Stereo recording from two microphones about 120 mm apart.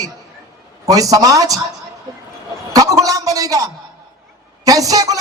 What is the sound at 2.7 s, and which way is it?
A man's voice, 30° right (ahead or behind).